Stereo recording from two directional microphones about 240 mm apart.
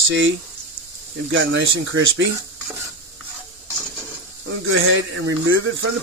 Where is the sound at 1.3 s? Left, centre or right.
Right.